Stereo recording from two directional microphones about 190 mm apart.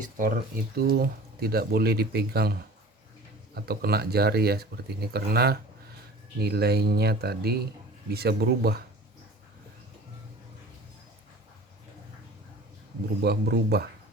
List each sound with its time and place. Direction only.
0.2 s speech: 50° right (ahead or behind)
13.2 s speech: 55° right (ahead or behind)